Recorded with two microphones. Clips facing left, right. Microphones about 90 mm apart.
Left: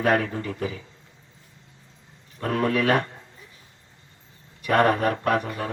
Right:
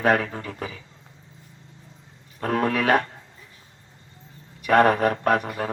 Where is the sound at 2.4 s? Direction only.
40° right (ahead or behind).